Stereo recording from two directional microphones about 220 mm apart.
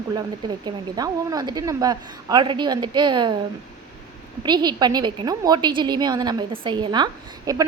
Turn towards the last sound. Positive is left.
turn(degrees=-15)  # may be behind; listen again after turning